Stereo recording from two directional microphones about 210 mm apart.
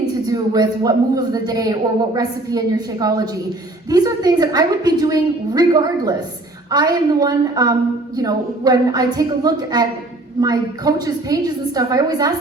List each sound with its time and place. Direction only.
0.3 s a woman's voice: 15° right (ahead or behind)